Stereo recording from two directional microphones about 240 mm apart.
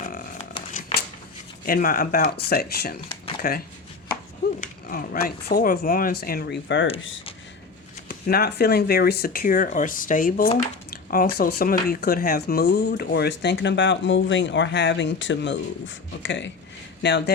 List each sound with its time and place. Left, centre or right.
0.0 s a sound: left
0.7 s shuffling cards: left
1.6 s speech: left
4.6 s speech: left
8.0 s speech: left